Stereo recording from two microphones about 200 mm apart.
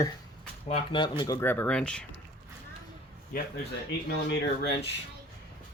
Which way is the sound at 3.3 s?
45° left (ahead or behind).